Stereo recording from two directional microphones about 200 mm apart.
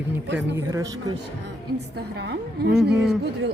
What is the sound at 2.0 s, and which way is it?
Speech, 60° right (ahead or behind).